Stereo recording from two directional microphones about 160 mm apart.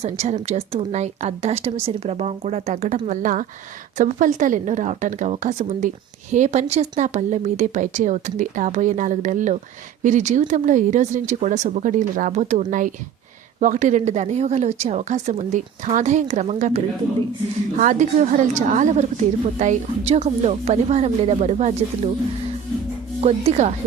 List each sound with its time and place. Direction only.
0.0 s a woman's voice: 45° right (ahead or behind)
23.2 s a woman's voice: 45° right (ahead or behind)